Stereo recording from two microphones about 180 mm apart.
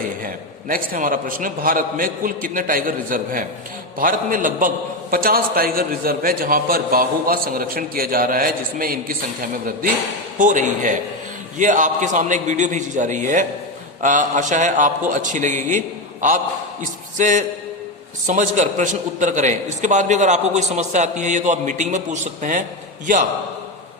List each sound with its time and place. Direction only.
0.2 s a man's voice: 50° right (ahead or behind)
10.3 s a man's voice: 45° right (ahead or behind)
17.2 s a man's voice: 45° right (ahead or behind)